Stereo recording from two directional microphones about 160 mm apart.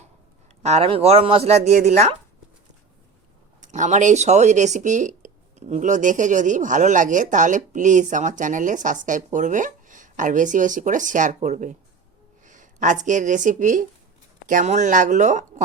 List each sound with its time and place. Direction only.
0.6 s speech: 40° right (ahead or behind)
3.6 s speech: 50° right (ahead or behind)